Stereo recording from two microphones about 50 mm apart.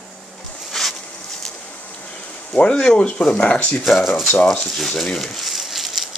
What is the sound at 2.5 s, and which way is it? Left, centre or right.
Speech, centre.